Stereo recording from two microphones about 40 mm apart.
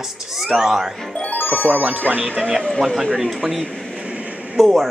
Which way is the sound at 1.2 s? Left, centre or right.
Left.